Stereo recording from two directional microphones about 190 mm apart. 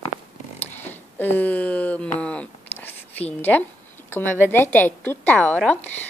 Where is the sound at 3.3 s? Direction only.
10° left (ahead or behind).